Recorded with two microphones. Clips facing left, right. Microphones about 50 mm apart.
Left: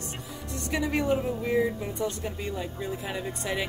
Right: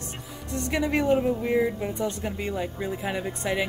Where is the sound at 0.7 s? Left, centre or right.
Right.